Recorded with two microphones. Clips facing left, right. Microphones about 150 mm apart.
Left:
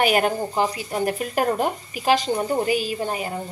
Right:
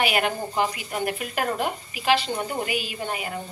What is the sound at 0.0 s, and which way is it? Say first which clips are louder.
Speech: left 4 dB; 40° left (ahead or behind).